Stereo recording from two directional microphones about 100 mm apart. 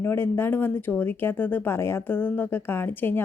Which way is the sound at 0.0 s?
25° left (ahead or behind).